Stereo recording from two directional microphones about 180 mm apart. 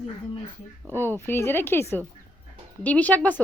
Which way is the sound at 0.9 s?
10° left (ahead or behind).